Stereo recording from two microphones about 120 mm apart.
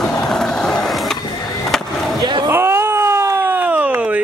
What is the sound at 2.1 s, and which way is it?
Vehicle, 40° right (ahead or behind).